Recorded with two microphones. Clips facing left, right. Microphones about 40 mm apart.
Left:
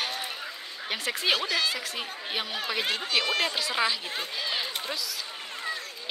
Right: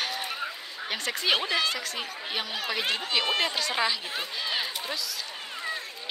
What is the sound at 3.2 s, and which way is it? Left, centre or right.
Speech, centre.